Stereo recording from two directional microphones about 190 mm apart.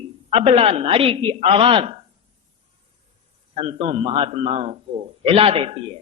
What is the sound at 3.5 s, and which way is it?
A man's voice, 30° right (ahead or behind).